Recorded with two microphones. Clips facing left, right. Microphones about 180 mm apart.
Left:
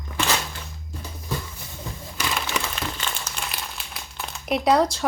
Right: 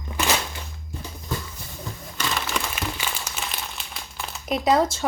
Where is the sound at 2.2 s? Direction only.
Centre (ahead or behind).